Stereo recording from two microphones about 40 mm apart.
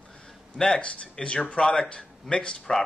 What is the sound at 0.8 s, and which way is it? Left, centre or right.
Speech, left.